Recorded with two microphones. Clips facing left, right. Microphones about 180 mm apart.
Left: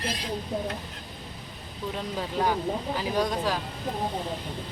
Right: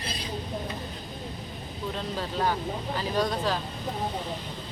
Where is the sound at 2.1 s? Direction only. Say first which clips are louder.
Left 2 dB; 10° left (ahead or behind).